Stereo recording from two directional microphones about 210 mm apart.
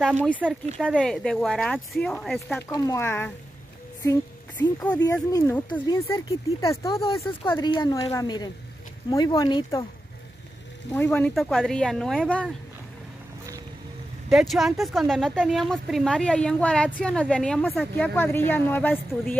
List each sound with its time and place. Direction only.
0.0 s speech: centre (ahead or behind)
2.7 s a woman's voice: 15° left (ahead or behind)
10.9 s speech: 5° left (ahead or behind)
14.3 s speech: centre (ahead or behind)